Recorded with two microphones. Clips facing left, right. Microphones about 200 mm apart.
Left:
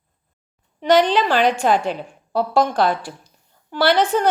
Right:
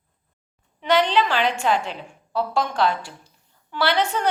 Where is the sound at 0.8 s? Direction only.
45° left (ahead or behind).